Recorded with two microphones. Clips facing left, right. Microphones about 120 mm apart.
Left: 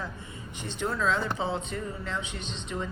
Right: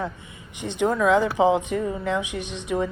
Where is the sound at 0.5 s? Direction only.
15° right (ahead or behind).